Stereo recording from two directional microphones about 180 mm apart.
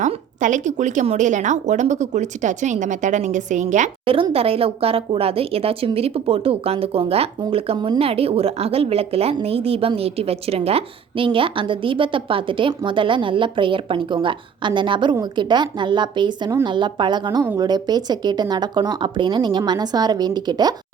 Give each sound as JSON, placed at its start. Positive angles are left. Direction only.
{"t": 0.0, "sound": "a woman's voice", "side_deg": -45}